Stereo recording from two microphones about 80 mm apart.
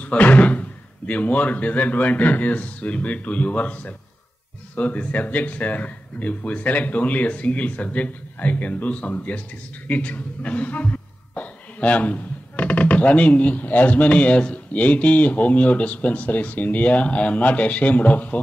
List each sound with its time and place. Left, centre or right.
0.0 s speech: centre